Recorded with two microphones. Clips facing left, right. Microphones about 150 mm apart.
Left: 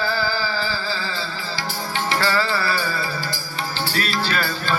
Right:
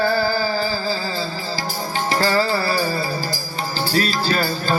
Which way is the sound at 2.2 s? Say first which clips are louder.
Right 4 dB; 40° right (ahead or behind).